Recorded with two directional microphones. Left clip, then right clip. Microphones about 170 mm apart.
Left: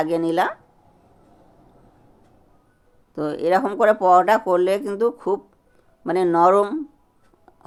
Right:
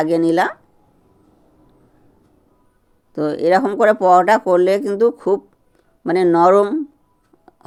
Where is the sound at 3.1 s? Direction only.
30° right (ahead or behind).